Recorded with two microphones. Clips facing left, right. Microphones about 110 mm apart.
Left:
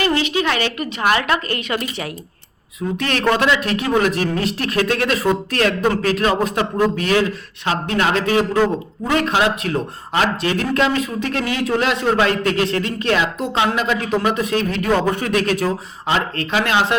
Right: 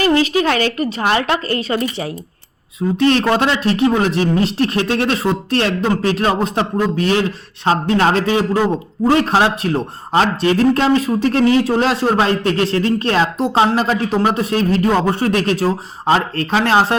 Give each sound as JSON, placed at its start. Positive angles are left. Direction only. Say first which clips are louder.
{"t": 0.0, "sound": "a man's voice", "louder": "right 4 dB", "side_deg": -35}